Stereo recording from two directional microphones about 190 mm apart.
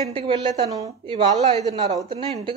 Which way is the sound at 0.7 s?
20° right (ahead or behind).